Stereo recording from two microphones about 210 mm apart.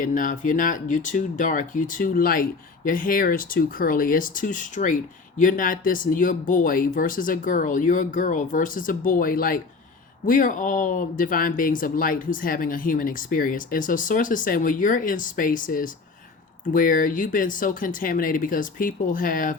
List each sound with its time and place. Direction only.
0.0 s speech: 40° left (ahead or behind)